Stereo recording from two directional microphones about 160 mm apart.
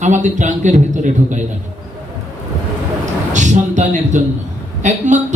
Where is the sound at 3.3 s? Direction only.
50° right (ahead or behind).